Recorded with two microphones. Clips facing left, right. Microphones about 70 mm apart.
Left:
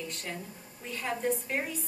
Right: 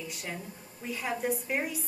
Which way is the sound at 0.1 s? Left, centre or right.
Centre.